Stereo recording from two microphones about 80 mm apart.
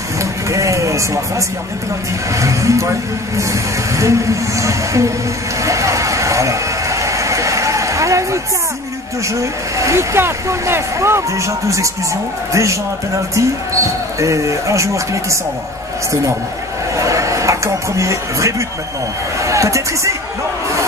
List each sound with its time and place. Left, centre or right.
0.2 s vehicle: right
2.3 s speech: right
3.9 s speech: right
5.6 s a sound: right
9.3 s speech: right
13.3 s speech: right
16.9 s a sound: right
19.4 s speech: right